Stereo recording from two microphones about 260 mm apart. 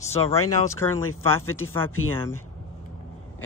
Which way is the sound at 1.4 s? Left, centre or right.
Left.